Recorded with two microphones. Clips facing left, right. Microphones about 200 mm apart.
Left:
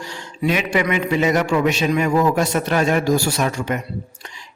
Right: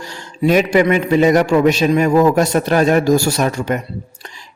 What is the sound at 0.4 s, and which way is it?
A man's voice, 40° right (ahead or behind).